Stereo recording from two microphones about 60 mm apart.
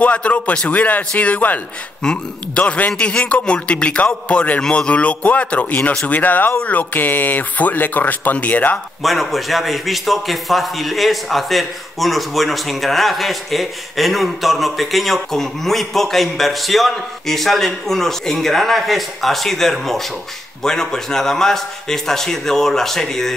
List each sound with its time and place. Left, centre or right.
0.0 s a man's voice: left
9.0 s a man's voice: centre